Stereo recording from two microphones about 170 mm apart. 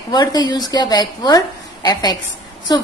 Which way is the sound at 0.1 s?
25° left (ahead or behind).